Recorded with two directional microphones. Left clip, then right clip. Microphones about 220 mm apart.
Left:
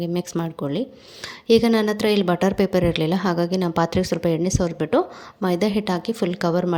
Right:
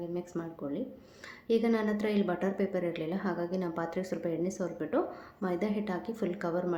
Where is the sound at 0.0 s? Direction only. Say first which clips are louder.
Left 11 dB; 40° left (ahead or behind).